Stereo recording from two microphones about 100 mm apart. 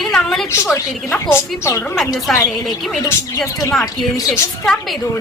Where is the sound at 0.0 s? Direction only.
5° left (ahead or behind).